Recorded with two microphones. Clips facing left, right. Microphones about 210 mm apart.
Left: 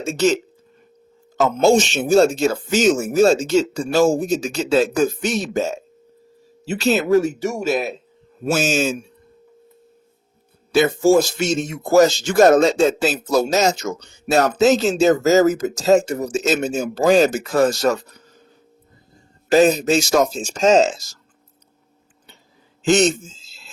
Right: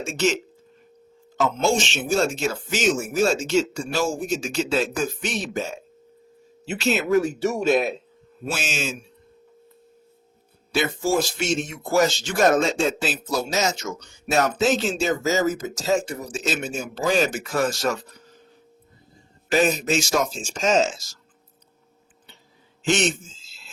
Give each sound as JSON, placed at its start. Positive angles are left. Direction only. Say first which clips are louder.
{"t": 0.0, "sound": "a man's voice", "louder": "left 5 dB", "side_deg": 35}
{"t": 1.4, "sound": "a man's voice", "louder": "left 7 dB", "side_deg": 40}
{"t": 7.3, "sound": "speech", "louder": "right 1 dB", "side_deg": 15}
{"t": 8.4, "sound": "a man's voice", "louder": "left 10 dB", "side_deg": 40}
{"t": 10.7, "sound": "a man's voice", "louder": "left 8 dB", "side_deg": 45}
{"t": 19.5, "sound": "a man's voice", "louder": "left 7 dB", "side_deg": 35}
{"t": 22.9, "sound": "a man's voice", "louder": "left 7 dB", "side_deg": 40}